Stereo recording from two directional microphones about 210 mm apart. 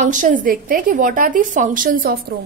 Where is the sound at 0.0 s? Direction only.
35° right (ahead or behind).